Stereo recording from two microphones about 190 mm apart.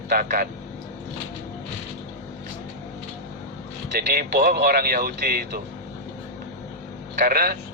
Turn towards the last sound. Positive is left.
turn(degrees=-50)  # may be behind; listen again after turning